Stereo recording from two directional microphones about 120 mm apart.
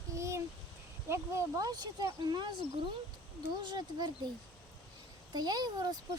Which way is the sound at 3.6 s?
35° right (ahead or behind).